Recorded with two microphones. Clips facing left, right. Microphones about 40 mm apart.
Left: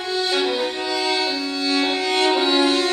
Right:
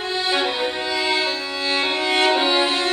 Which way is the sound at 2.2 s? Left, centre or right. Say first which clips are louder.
Even; centre.